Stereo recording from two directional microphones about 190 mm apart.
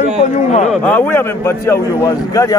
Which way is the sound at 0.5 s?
35° left (ahead or behind).